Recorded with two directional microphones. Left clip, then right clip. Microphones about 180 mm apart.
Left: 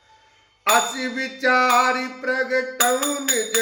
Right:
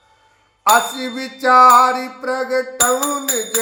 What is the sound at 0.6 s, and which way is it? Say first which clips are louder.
A man's voice: right 5 dB; 10° left (ahead or behind).